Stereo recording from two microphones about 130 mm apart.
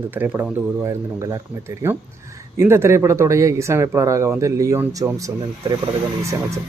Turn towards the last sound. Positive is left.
turn(degrees=-25)  # may be behind; listen again after turning